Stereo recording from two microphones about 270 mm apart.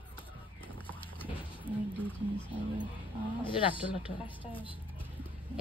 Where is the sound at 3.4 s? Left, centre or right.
Centre.